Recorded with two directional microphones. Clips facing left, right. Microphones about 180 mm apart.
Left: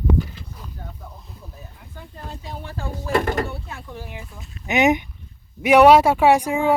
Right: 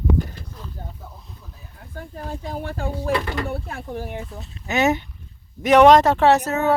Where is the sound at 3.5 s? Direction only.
55° right (ahead or behind).